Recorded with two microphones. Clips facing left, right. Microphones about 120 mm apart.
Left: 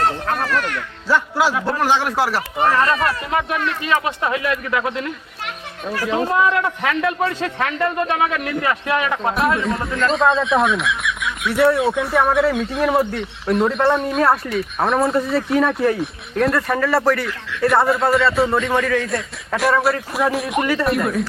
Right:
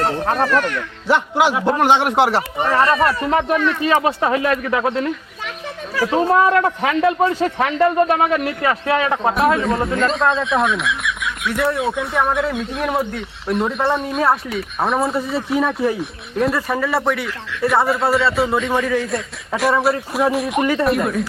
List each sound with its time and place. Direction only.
0.3 s a man's voice: 35° right (ahead or behind)
1.0 s a man's voice: 20° right (ahead or behind)
6.4 s a man's voice: 40° right (ahead or behind)
6.8 s a man's voice: 25° right (ahead or behind)
10.0 s speech: centre (ahead or behind)